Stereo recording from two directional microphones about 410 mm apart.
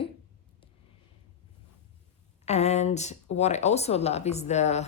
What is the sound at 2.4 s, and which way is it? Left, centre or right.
A woman's voice, centre.